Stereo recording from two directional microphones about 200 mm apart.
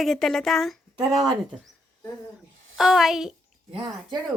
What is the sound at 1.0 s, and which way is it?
Speech, 20° right (ahead or behind).